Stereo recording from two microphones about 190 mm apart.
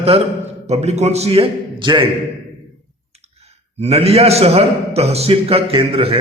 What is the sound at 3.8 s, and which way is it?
A man's voice, 35° right (ahead or behind).